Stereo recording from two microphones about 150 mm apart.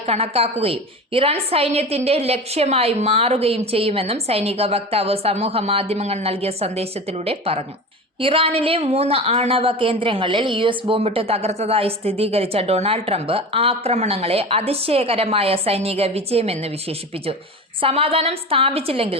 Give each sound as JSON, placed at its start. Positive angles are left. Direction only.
{"t": 0.0, "sound": "a woman's voice", "side_deg": -40}
{"t": 17.7, "sound": "a woman's voice", "side_deg": -40}